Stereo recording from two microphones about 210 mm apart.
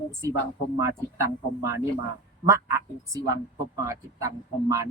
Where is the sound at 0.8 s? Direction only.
15° right (ahead or behind).